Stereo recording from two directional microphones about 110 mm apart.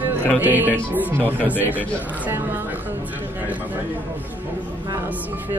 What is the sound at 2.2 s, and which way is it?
Speech, 15° right (ahead or behind).